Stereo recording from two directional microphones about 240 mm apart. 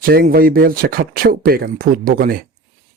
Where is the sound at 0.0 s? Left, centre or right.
Right.